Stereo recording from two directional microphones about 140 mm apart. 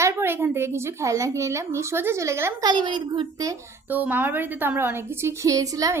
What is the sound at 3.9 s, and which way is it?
A woman's voice, 15° right (ahead or behind).